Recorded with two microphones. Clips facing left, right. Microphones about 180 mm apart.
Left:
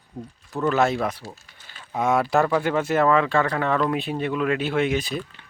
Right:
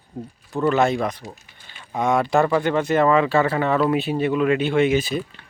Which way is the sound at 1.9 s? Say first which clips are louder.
Right 1 dB; 5° left (ahead or behind).